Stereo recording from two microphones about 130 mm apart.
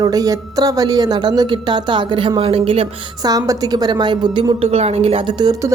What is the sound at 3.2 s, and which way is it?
A woman's voice, 30° right (ahead or behind).